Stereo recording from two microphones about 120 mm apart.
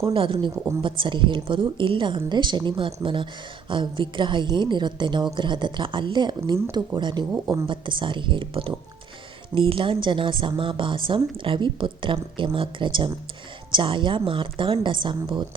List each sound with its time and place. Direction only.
0.1 s a woman's voice: 45° right (ahead or behind)
0.5 s a woman's voice: 25° right (ahead or behind)
0.8 s a woman's voice: 45° right (ahead or behind)